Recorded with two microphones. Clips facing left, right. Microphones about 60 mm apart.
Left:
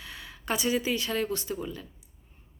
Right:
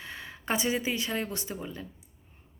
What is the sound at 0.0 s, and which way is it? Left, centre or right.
Speech, right.